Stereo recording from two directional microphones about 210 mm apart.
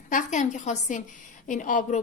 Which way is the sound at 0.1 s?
35° left (ahead or behind).